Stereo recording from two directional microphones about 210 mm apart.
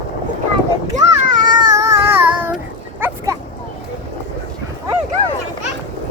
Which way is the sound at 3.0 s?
10° right (ahead or behind).